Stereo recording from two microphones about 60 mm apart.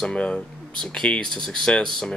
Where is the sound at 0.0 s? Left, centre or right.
Centre.